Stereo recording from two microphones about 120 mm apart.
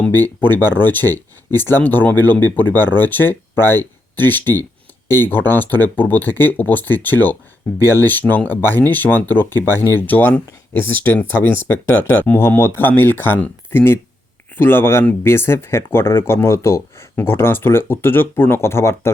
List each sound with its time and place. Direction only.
0.0 s speech: 15° left (ahead or behind)